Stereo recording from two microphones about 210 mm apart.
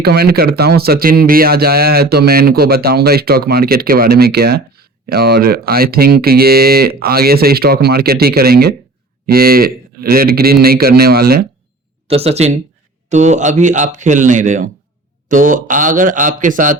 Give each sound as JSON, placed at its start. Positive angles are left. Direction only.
{"t": 0.0, "sound": "speech", "side_deg": -50}
{"t": 12.0, "sound": "a man's voice", "side_deg": -30}